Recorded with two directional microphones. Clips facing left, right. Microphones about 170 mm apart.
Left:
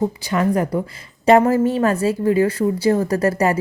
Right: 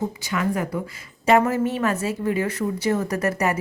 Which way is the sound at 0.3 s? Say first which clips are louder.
Left 5 dB; 35° left (ahead or behind).